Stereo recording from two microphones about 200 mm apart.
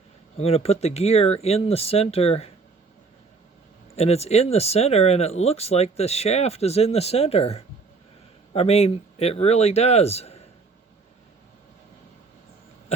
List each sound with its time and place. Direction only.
0.3 s speech: 30° left (ahead or behind)
3.9 s speech: 30° left (ahead or behind)